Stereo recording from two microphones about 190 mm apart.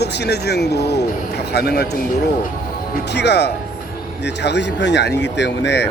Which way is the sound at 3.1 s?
65° left (ahead or behind).